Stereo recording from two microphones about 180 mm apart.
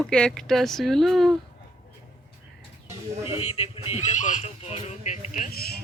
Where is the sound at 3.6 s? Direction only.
35° left (ahead or behind); by 5.8 s 55° left (ahead or behind).